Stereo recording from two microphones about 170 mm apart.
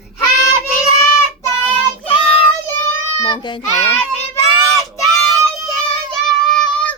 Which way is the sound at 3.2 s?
25° left (ahead or behind).